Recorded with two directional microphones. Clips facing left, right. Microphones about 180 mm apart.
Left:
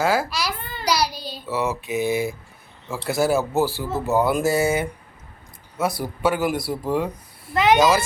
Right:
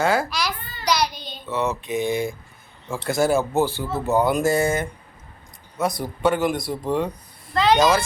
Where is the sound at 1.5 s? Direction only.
5° left (ahead or behind).